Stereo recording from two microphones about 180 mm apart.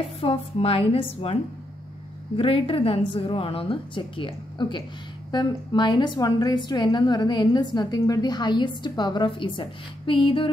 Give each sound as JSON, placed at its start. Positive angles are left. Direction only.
{"t": 0.2, "sound": "a woman's voice", "side_deg": 30}